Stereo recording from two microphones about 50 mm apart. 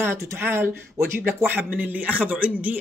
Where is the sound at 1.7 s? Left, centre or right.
Right.